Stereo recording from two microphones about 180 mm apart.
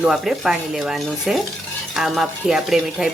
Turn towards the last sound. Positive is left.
turn(degrees=0)  # may be behind; listen again after turning